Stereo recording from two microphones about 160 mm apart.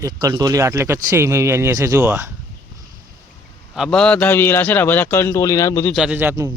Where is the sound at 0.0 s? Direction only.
20° right (ahead or behind).